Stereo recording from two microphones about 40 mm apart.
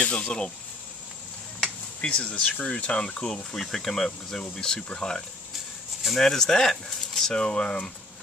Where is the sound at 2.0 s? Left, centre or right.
Left; by 7.4 s centre.